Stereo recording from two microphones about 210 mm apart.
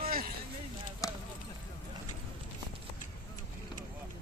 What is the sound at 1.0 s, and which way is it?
Clip-clop, 15° left (ahead or behind).